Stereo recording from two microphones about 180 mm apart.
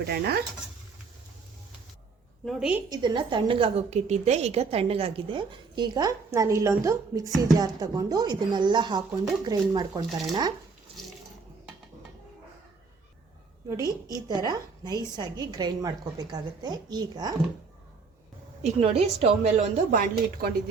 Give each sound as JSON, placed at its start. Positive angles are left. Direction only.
{"t": 0.1, "sound": "speech", "side_deg": -65}
{"t": 2.4, "sound": "a woman's voice", "side_deg": 0}
{"t": 2.9, "sound": "a woman's voice", "side_deg": -25}
{"t": 10.9, "sound": "water", "side_deg": -30}
{"t": 13.7, "sound": "a woman's voice", "side_deg": -20}
{"t": 18.6, "sound": "a woman's voice", "side_deg": -35}